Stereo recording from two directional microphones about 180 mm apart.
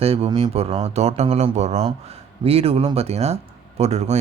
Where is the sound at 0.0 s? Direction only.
35° right (ahead or behind).